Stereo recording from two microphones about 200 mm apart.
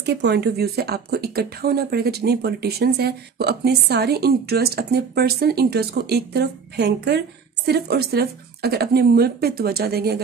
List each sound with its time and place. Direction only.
0.0 s speech: 55° right (ahead or behind)